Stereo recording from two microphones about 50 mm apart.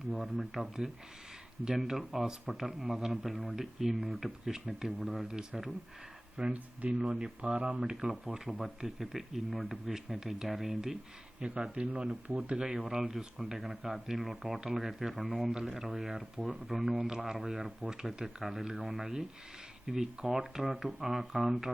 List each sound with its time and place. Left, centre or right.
0.1 s speech: centre
6.4 s speech: right
11.3 s speech: centre